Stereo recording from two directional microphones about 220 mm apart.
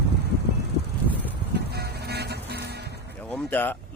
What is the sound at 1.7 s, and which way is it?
Music, 45° right (ahead or behind).